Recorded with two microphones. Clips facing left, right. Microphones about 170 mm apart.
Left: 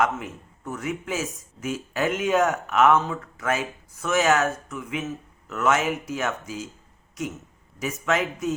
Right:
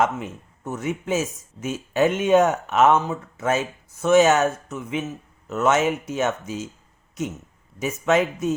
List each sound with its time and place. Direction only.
0.0 s speech: 25° right (ahead or behind)
8.0 s speech: 20° right (ahead or behind)